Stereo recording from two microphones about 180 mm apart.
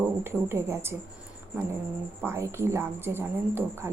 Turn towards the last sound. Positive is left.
turn(degrees=-10)  # may be behind; listen again after turning